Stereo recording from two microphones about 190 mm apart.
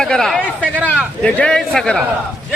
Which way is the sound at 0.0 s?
5° left (ahead or behind).